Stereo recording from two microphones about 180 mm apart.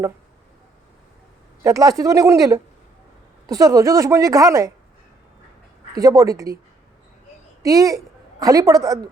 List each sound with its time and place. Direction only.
1.6 s a woman's voice: 20° right (ahead or behind)
5.9 s speech: 20° right (ahead or behind)
7.6 s a woman's voice: 20° right (ahead or behind)